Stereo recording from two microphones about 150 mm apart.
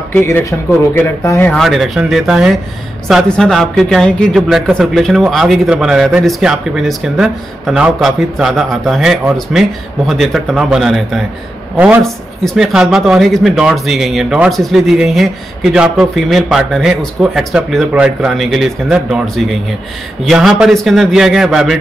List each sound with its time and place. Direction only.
0.2 s speech: 15° left (ahead or behind)
1.5 s speech: centre (ahead or behind)
11.7 s speech: 15° right (ahead or behind)
12.0 s speech: centre (ahead or behind)